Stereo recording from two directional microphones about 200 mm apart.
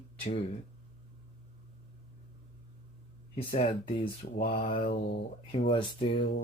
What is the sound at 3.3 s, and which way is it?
Speech, 30° left (ahead or behind).